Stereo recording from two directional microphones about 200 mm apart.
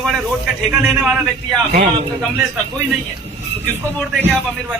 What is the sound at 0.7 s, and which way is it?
Speech, 5° right (ahead or behind).